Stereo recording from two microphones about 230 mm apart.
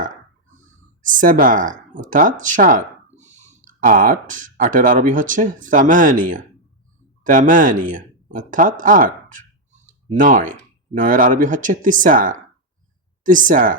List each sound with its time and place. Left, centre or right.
1.0 s speech: right